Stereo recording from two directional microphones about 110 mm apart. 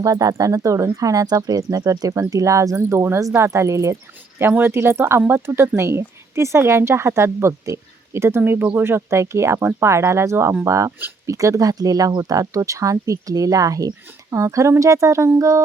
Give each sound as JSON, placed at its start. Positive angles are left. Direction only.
{"t": 0.0, "sound": "speech", "side_deg": -35}